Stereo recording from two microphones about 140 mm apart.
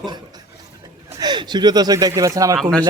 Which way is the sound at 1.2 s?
30° right (ahead or behind).